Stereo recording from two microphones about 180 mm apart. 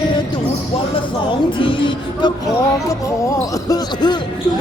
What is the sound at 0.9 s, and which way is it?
Music, 30° left (ahead or behind).